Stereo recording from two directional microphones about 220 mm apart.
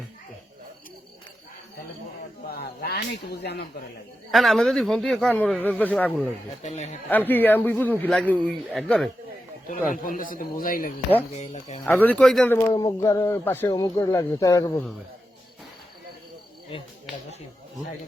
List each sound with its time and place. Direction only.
2.5 s a sound: 45° left (ahead or behind)
4.3 s speech: centre (ahead or behind)
6.6 s a man's voice: 30° left (ahead or behind)
7.1 s speech: 10° left (ahead or behind)
9.6 s a man's voice: 35° left (ahead or behind)
11.8 s speech: 10° left (ahead or behind)
12.5 s speech: 15° left (ahead or behind)